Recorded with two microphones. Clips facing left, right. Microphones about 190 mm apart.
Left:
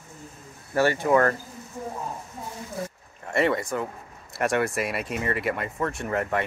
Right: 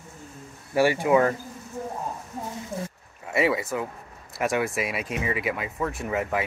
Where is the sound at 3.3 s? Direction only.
5° right (ahead or behind).